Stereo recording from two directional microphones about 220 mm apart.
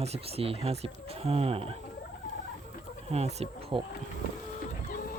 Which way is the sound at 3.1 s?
30° right (ahead or behind).